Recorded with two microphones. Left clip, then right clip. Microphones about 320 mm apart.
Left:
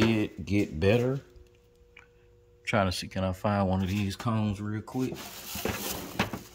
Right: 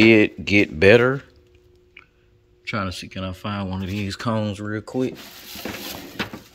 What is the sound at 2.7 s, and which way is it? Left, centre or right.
Speech, centre.